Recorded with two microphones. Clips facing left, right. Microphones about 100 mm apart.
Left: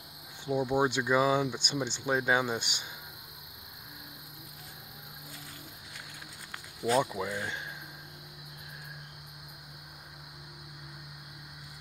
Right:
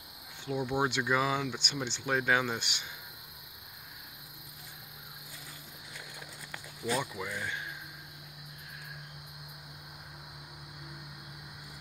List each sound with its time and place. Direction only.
0.5 s speech: 20° left (ahead or behind)
6.9 s speech: 30° left (ahead or behind)